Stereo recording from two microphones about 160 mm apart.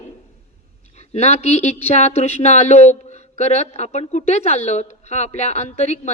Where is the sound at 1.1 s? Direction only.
45° left (ahead or behind).